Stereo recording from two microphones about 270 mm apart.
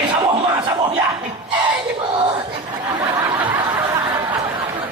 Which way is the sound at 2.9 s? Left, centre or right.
Centre.